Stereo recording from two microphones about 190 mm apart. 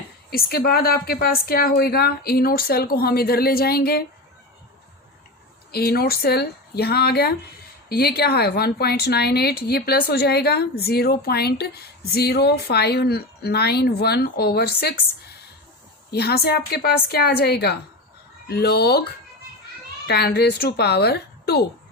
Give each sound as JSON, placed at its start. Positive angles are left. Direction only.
{"t": 0.3, "sound": "a woman's voice", "side_deg": 55}
{"t": 5.7, "sound": "a woman's voice", "side_deg": 55}